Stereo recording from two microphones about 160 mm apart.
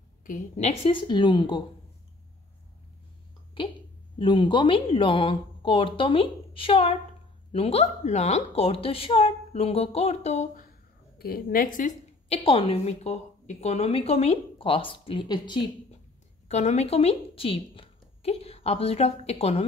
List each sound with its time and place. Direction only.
0.2 s a woman's voice: 55° left (ahead or behind); by 1.6 s 30° left (ahead or behind)
4.2 s a woman's voice: 30° left (ahead or behind); by 10.7 s 55° left (ahead or behind)
11.1 s a woman's voice: 70° left (ahead or behind)
12.3 s a woman's voice: 35° left (ahead or behind)
16.4 s a woman's voice: 45° left (ahead or behind)